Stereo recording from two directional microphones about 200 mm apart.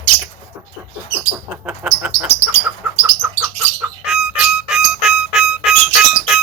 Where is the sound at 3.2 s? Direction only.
5° right (ahead or behind).